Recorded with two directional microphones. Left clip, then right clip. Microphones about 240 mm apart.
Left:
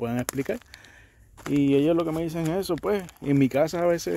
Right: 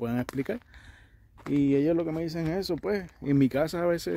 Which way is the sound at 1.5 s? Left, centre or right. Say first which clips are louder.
Left 3 dB; centre.